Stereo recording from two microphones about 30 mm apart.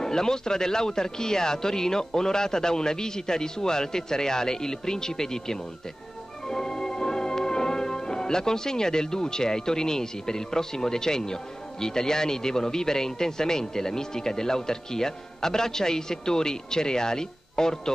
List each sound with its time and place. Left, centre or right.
0.0 s music: centre